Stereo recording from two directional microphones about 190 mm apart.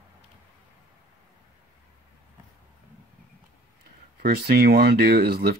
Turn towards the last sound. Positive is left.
turn(degrees=-55)  # may be behind; listen again after turning